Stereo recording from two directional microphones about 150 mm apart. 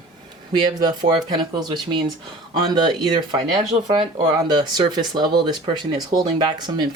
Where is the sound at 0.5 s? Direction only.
30° right (ahead or behind).